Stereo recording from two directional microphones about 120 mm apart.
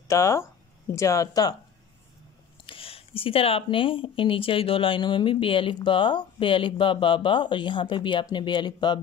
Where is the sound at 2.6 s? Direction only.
50° left (ahead or behind).